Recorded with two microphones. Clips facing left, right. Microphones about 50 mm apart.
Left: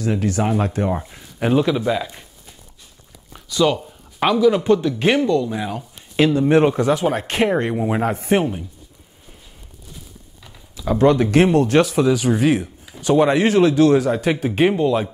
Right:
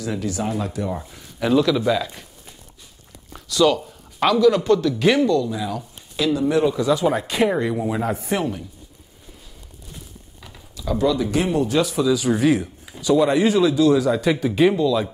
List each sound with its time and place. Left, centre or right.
0.0 s a man's voice: left
1.8 s speech: left
3.3 s a man's voice: centre; by 8.5 s left
10.9 s a man's voice: left